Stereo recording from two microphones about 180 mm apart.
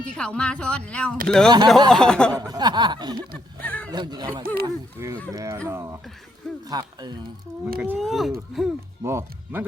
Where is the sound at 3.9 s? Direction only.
25° right (ahead or behind).